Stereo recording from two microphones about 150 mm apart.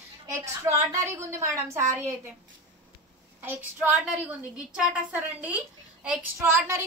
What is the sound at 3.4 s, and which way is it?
Speech, 10° right (ahead or behind).